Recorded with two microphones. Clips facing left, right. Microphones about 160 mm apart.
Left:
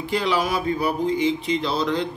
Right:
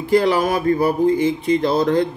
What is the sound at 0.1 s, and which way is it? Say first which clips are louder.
Speech: right 7 dB; 50° right (ahead or behind).